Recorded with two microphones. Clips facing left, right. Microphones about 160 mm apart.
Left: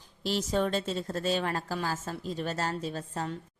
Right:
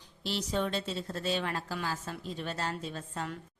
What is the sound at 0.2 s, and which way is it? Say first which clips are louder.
A woman's voice: left 4 dB; 45° left (ahead or behind).